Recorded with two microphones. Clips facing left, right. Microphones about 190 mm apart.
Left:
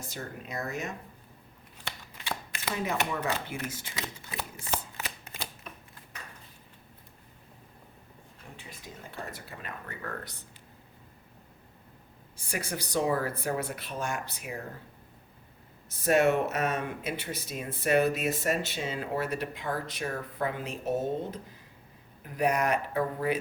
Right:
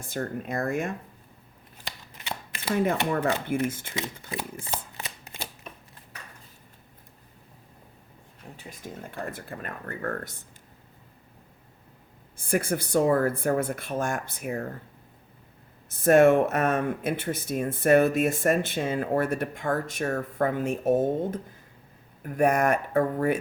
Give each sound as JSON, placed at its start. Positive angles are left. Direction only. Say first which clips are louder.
{"t": 0.1, "sound": "speech", "louder": "right 11 dB", "side_deg": -55}
{"t": 2.7, "sound": "speech", "louder": "right 7 dB", "side_deg": -55}
{"t": 8.4, "sound": "a sound", "louder": "right 3 dB", "side_deg": -35}
{"t": 9.1, "sound": "speech", "louder": "right 5 dB", "side_deg": -50}
{"t": 12.4, "sound": "speech", "louder": "right 9 dB", "side_deg": -50}
{"t": 15.9, "sound": "speech", "louder": "right 7 dB", "side_deg": -50}